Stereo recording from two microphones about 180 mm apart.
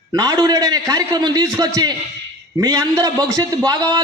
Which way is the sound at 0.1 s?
20° right (ahead or behind).